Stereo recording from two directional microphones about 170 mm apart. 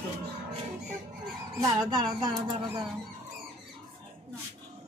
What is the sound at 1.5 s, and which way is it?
Speech, 25° right (ahead or behind).